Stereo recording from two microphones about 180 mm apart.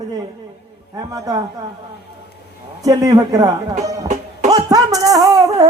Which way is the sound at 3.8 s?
40° right (ahead or behind).